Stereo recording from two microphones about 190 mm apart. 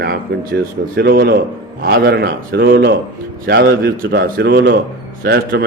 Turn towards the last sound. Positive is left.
turn(degrees=-55)  # may be behind; listen again after turning